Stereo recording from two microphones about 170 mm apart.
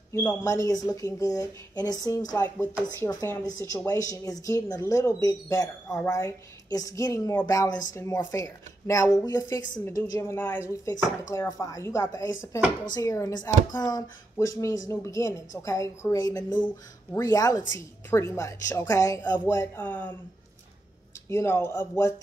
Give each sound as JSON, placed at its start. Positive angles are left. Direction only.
{"t": 0.1, "sound": "a woman's voice", "side_deg": 15}
{"t": 21.3, "sound": "a woman's voice", "side_deg": 15}